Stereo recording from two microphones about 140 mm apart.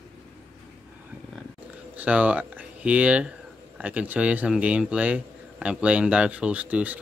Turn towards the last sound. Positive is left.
turn(degrees=-10)  # may be behind; listen again after turning